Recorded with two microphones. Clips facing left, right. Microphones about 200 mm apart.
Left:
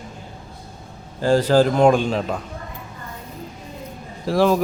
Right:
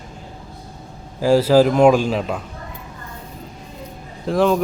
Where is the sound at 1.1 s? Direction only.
5° right (ahead or behind).